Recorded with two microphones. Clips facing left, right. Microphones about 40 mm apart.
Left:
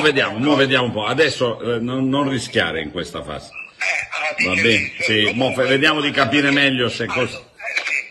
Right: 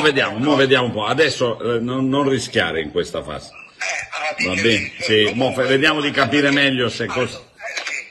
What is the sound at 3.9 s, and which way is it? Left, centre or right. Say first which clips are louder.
Speech: left 2 dB; left.